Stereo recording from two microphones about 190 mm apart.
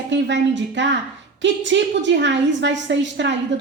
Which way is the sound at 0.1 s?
70° right (ahead or behind).